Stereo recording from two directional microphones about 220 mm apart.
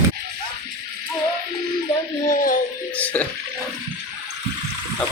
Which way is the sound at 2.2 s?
40° left (ahead or behind).